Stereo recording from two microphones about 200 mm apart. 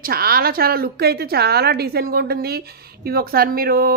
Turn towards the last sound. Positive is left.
turn(degrees=-45)  # may be behind; listen again after turning